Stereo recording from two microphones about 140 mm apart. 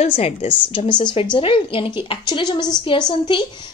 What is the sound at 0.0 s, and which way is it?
A woman's voice, 50° left (ahead or behind).